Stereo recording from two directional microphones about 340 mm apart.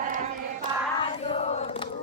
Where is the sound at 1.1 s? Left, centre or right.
Centre.